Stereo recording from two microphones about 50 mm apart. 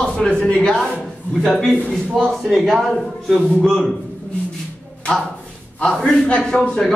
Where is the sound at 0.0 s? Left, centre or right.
Centre.